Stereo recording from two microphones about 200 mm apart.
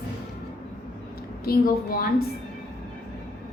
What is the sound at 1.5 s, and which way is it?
Speech, 45° left (ahead or behind).